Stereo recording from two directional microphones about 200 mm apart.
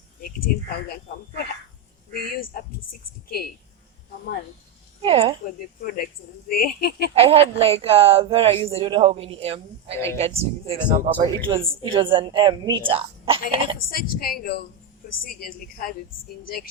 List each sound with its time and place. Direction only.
0.2 s a woman's voice: 50° left (ahead or behind)
2.1 s a woman's voice: 50° left (ahead or behind)
5.0 s a woman's voice: 30° right (ahead or behind)
6.5 s a woman's voice: 45° left (ahead or behind)
7.1 s a woman's voice: 30° right (ahead or behind)
11.6 s a woman's voice: 10° right (ahead or behind)
11.9 s a woman's voice: 25° right (ahead or behind)
13.9 s a woman's voice: 50° left (ahead or behind)